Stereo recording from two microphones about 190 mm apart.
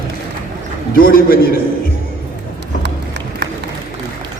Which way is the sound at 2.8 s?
65° right (ahead or behind).